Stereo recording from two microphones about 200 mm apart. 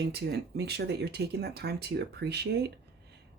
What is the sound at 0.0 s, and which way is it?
Speech, 55° right (ahead or behind).